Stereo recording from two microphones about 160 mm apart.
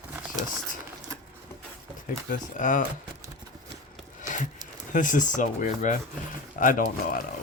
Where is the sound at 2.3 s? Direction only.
55° left (ahead or behind).